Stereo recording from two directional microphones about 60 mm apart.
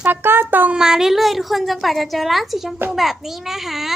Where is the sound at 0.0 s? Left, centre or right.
Right.